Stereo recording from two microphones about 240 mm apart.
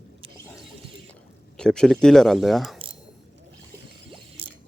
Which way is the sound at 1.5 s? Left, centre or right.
Centre.